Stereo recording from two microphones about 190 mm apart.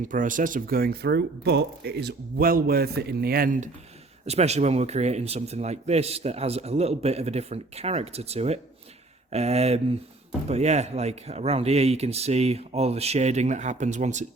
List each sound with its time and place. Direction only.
0.0 s speech: 45° right (ahead or behind)
4.3 s a man's voice: 35° right (ahead or behind)